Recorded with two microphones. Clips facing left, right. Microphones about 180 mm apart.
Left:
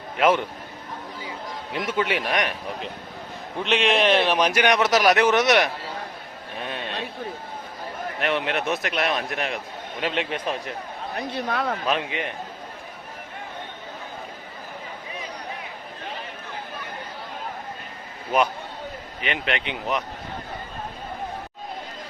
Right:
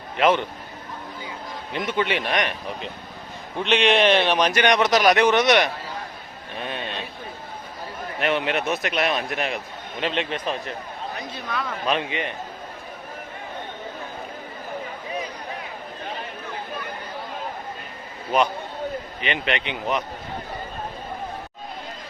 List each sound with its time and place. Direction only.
0.2 s a man's voice: 5° left (ahead or behind)
1.7 s a man's voice: 5° left (ahead or behind)
6.6 s a sound: centre (ahead or behind)
8.2 s a man's voice: centre (ahead or behind)
11.3 s a man's voice: 60° left (ahead or behind)
11.9 s a man's voice: centre (ahead or behind)
19.2 s a man's voice: centre (ahead or behind)